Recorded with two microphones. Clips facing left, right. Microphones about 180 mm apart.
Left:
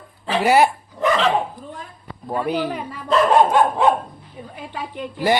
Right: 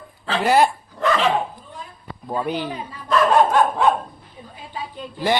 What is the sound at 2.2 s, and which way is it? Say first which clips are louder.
Speech: left 2 dB; 5° left (ahead or behind).